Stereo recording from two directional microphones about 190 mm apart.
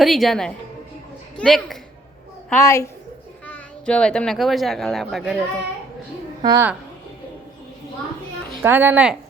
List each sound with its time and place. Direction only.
0.0 s a woman's voice: centre (ahead or behind)
2.5 s a woman's voice: 15° left (ahead or behind); by 5.4 s centre (ahead or behind)
6.4 s a woman's voice: 20° right (ahead or behind)
8.6 s speech: 10° right (ahead or behind)